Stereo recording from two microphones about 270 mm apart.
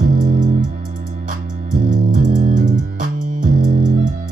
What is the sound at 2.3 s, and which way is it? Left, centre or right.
Music, right.